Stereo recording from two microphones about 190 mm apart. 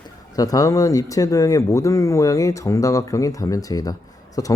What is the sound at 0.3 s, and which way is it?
Speech, 20° left (ahead or behind).